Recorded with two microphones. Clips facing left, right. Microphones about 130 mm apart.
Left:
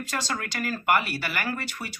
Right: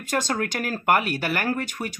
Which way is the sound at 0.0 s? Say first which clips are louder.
Right 6 dB; 50° right (ahead or behind).